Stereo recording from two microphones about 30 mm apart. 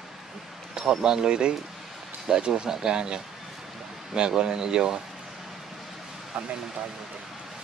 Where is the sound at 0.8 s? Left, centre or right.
Right.